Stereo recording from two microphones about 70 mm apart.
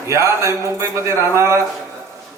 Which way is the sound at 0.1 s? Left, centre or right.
Right.